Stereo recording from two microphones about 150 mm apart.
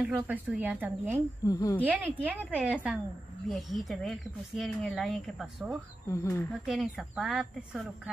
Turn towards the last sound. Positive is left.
turn(degrees=0)  # may be behind; listen again after turning